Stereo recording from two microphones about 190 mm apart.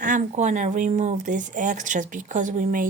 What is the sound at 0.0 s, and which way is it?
Speech, 40° right (ahead or behind).